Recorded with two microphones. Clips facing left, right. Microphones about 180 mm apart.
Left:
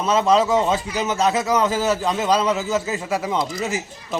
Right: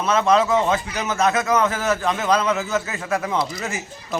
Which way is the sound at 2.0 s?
20° left (ahead or behind).